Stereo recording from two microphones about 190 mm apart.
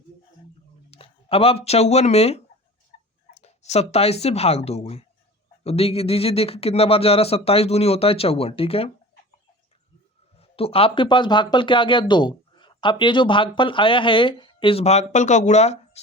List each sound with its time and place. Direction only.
0.9 s speech: 30° left (ahead or behind)
10.3 s speech: 30° left (ahead or behind)